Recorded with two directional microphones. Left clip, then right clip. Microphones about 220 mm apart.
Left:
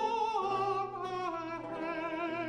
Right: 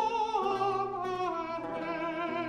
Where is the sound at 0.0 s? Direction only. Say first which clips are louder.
Right 2 dB; 20° left (ahead or behind).